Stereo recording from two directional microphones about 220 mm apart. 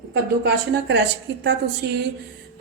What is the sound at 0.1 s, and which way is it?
Speech, 50° right (ahead or behind).